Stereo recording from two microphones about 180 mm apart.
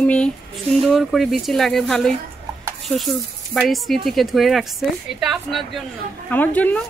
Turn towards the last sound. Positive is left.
turn(degrees=10)  # may be behind; listen again after turning